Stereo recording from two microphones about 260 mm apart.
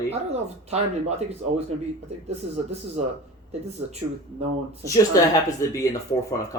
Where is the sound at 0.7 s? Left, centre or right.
Right.